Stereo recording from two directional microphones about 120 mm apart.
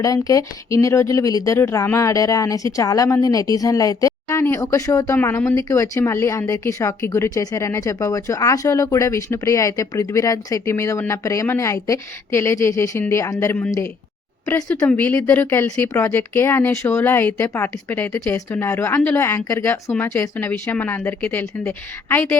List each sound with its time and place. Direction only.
0.0 s a woman's voice: 30° left (ahead or behind)